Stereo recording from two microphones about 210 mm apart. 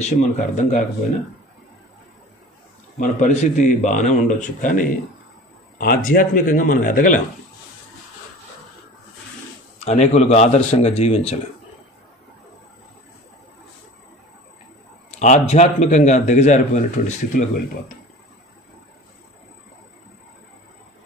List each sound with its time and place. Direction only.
0.0 s speech: 35° left (ahead or behind)
3.0 s speech: 35° left (ahead or behind)
9.8 s speech: 30° left (ahead or behind)
15.1 s speech: 35° left (ahead or behind)